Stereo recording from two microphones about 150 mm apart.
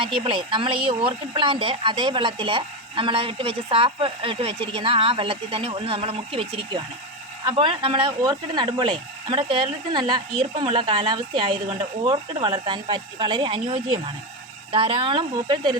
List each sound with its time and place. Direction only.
0.0 s speech: 35° right (ahead or behind)